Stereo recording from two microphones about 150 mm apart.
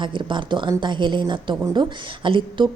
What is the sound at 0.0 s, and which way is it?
Speech, 30° right (ahead or behind).